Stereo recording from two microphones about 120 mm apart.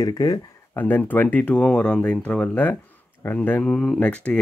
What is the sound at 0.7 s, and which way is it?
Speech, 15° left (ahead or behind).